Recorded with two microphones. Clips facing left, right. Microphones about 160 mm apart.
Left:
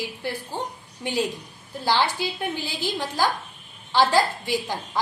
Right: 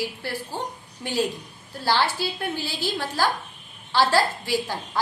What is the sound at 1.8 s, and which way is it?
A woman's voice, 15° left (ahead or behind).